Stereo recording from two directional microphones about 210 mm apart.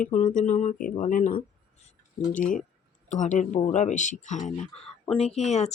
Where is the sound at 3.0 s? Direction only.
35° left (ahead or behind).